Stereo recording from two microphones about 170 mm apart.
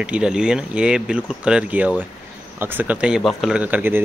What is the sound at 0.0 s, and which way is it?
A man's voice, 5° right (ahead or behind).